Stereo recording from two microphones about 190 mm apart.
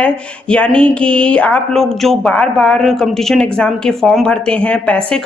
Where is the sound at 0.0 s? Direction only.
5° left (ahead or behind).